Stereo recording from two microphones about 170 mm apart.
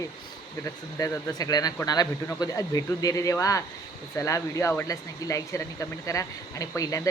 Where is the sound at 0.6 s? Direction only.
20° left (ahead or behind).